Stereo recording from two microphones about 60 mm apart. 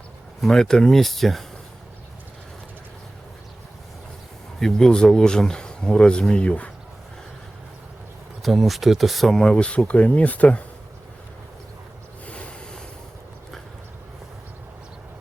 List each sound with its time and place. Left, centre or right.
0.4 s speech: centre
4.6 s speech: centre
8.4 s speech: centre
9.4 s speech: centre
12.2 s a sound: left